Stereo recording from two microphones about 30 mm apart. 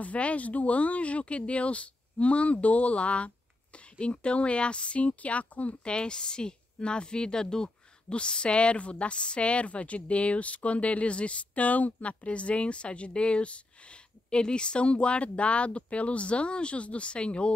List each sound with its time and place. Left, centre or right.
0.0 s a woman's voice: left
5.9 s a woman's voice: left